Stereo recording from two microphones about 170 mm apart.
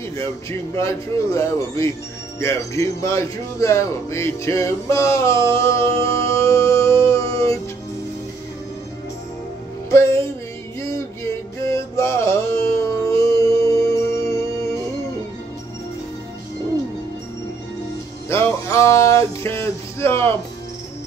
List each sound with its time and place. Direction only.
0.5 s speech: 15° left (ahead or behind)
9.8 s music: 15° left (ahead or behind)
18.3 s a sound: 15° left (ahead or behind)